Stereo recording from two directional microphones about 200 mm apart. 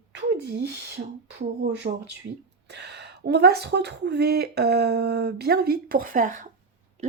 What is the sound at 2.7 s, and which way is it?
Speech, 55° right (ahead or behind).